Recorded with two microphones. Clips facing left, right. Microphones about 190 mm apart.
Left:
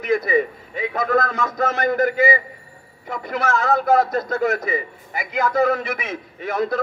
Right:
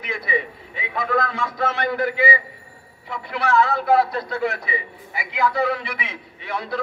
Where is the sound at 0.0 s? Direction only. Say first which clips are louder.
Left 8 dB; 45° left (ahead or behind).